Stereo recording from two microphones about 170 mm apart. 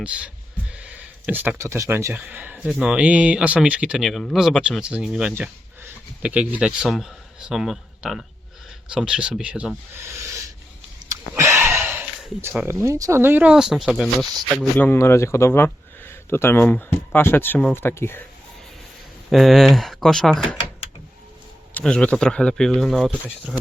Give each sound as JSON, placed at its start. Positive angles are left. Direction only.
{"t": 0.0, "sound": "speech", "side_deg": -5}
{"t": 11.1, "sound": "a sound", "side_deg": -15}
{"t": 11.8, "sound": "speech", "side_deg": -15}
{"t": 19.3, "sound": "speech", "side_deg": 0}
{"t": 21.8, "sound": "speech", "side_deg": 5}